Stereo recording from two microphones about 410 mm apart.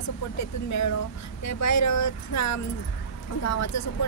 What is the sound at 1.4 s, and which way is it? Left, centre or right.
A woman's voice, left.